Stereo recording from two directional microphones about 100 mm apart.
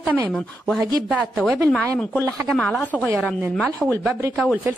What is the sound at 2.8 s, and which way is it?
Speech, 15° left (ahead or behind).